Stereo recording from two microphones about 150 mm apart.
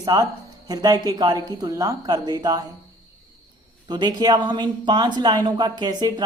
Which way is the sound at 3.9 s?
30° right (ahead or behind).